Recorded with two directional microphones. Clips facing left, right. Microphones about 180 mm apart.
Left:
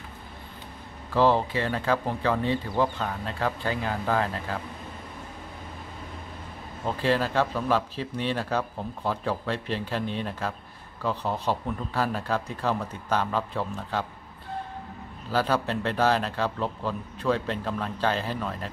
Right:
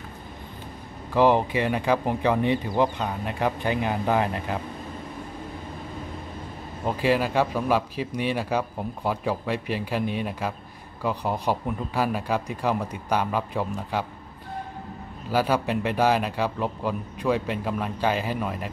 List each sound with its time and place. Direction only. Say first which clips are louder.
1.1 s a man's voice: right 2 dB; 15° right (ahead or behind)
6.8 s a man's voice: right 2 dB; 10° right (ahead or behind)
15.2 s a man's voice: right 2 dB; 10° right (ahead or behind)